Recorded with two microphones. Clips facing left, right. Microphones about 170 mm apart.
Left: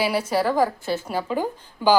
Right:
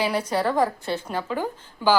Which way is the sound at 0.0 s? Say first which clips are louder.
Left 2 dB; 5° left (ahead or behind).